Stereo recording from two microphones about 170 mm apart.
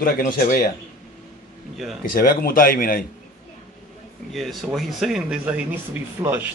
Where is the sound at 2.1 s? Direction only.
60° left (ahead or behind).